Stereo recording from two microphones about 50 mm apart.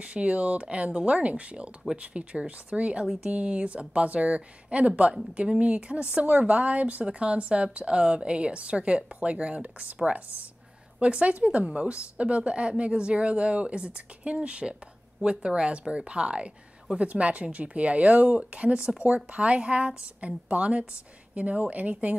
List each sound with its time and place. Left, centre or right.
0.0 s speech: right
11.0 s speech: right